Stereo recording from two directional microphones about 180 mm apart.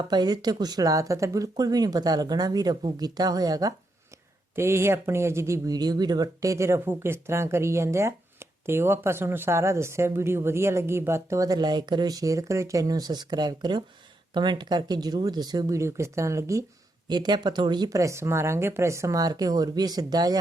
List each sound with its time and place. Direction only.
0.1 s speech: 25° right (ahead or behind)